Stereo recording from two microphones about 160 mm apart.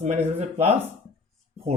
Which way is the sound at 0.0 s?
45° right (ahead or behind).